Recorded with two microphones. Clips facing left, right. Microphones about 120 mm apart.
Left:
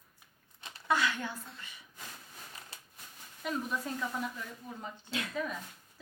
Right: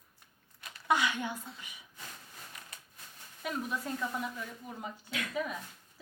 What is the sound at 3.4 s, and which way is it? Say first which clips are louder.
Speech: left 1 dB; centre (ahead or behind).